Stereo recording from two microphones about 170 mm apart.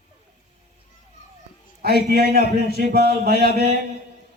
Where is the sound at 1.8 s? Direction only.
65° right (ahead or behind).